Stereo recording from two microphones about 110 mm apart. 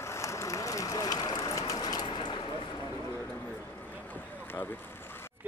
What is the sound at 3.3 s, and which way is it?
Boat, 15° left (ahead or behind).